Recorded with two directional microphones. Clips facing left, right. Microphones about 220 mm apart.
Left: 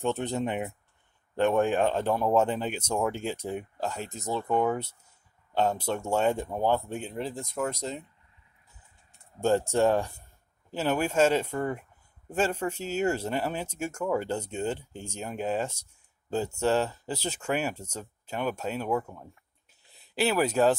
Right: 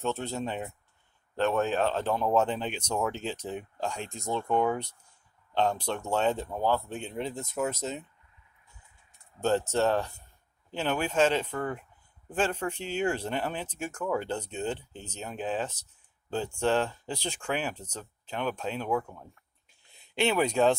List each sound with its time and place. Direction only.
0.0 s speech: 15° left (ahead or behind)
7.1 s speech: centre (ahead or behind)
9.4 s speech: 10° left (ahead or behind)